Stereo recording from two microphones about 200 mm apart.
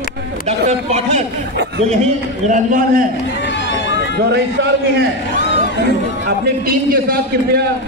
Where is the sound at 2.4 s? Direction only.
40° right (ahead or behind).